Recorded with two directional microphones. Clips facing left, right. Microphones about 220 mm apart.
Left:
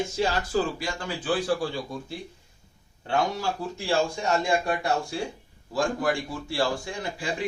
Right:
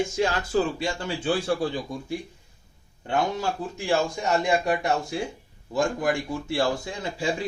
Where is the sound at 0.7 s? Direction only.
25° right (ahead or behind).